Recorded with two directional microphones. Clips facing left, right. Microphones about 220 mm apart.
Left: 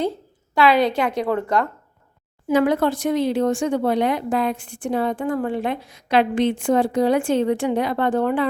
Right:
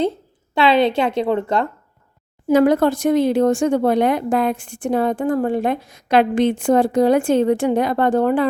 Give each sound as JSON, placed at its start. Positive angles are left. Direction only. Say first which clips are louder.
{"t": 0.5, "sound": "a woman's voice", "louder": "right 2 dB", "side_deg": -25}
{"t": 2.5, "sound": "speech", "louder": "right 4 dB", "side_deg": -40}